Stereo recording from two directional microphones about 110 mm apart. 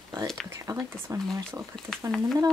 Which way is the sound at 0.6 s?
30° right (ahead or behind).